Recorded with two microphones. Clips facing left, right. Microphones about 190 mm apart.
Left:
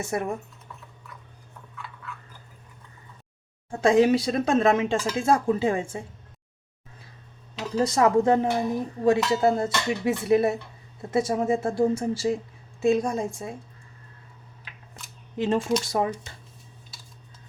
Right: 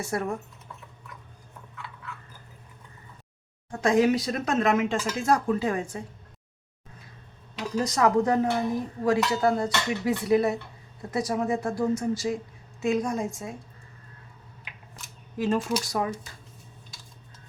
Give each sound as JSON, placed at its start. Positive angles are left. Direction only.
{"t": 0.0, "sound": "speech", "side_deg": 20}
{"t": 3.7, "sound": "speech", "side_deg": 30}
{"t": 7.8, "sound": "speech", "side_deg": 25}
{"t": 15.4, "sound": "speech", "side_deg": 25}